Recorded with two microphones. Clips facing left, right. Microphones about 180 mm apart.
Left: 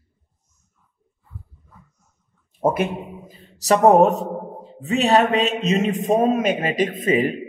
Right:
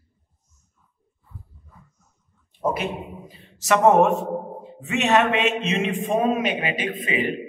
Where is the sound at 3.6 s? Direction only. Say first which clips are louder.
Left 3 dB; 35° left (ahead or behind).